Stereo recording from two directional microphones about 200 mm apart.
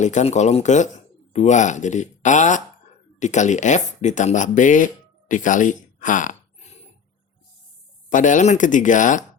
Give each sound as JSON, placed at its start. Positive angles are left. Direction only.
{"t": 0.0, "sound": "speech", "side_deg": 35}
{"t": 8.1, "sound": "speech", "side_deg": 40}